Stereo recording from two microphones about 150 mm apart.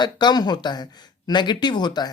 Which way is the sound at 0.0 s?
30° left (ahead or behind).